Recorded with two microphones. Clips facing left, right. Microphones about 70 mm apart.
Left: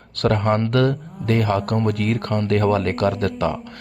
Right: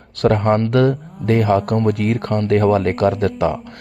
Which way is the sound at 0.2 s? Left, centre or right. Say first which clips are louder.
Right 4 dB; right.